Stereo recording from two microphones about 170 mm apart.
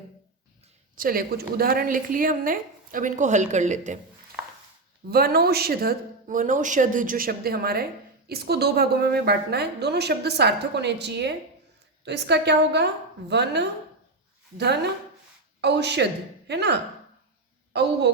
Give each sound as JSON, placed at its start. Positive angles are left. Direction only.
{"t": 0.9, "sound": "a woman's voice", "side_deg": -60}
{"t": 5.1, "sound": "a woman's voice", "side_deg": -65}
{"t": 15.6, "sound": "speech", "side_deg": -85}